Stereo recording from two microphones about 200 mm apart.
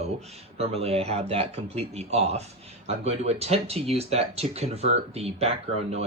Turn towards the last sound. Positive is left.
turn(degrees=-30)  # may be behind; listen again after turning